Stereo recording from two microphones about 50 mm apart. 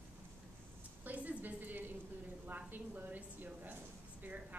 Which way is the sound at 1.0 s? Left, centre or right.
Right.